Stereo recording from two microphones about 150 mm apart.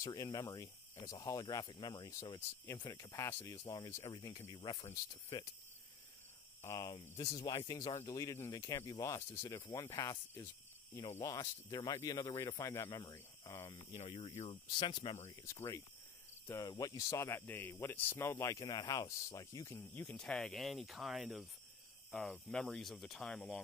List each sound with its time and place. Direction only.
0.0 s speech: 25° left (ahead or behind)
6.6 s speech: 20° left (ahead or behind)
13.9 s speech: 45° left (ahead or behind)
14.8 s speech: 35° left (ahead or behind)
15.4 s speech: 20° left (ahead or behind); by 23.6 s 5° left (ahead or behind)